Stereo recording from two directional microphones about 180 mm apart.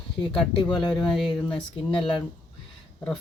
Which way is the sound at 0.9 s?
5° left (ahead or behind).